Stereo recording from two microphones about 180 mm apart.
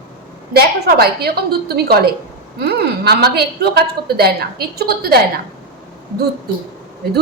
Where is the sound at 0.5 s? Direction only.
60° right (ahead or behind).